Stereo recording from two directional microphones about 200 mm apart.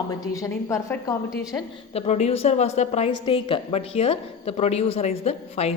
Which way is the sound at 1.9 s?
30° left (ahead or behind).